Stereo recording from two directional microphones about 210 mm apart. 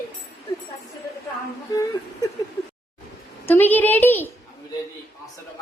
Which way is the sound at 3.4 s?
10° left (ahead or behind).